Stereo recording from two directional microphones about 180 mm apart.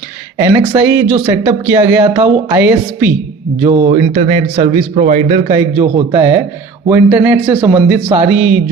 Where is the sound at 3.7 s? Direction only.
35° right (ahead or behind).